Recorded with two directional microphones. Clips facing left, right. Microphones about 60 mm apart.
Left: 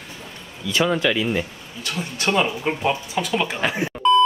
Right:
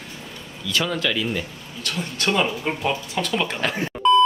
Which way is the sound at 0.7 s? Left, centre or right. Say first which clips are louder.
Left 4 dB; left.